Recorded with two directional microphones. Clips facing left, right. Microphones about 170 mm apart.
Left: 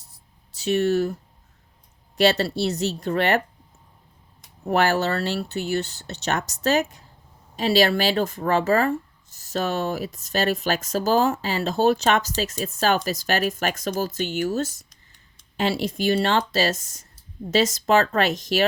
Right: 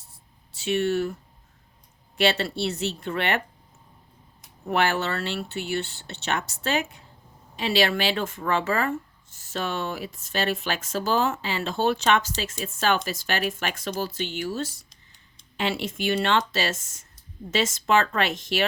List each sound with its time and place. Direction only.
0.1 s a sound: 40° left (ahead or behind)
2.1 s speech: 40° left (ahead or behind)
4.7 s speech: 40° left (ahead or behind)